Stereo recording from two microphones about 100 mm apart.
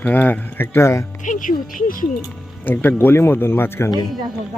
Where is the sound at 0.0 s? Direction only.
15° left (ahead or behind).